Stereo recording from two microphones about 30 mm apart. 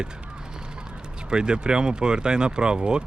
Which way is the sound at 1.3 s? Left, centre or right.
Right.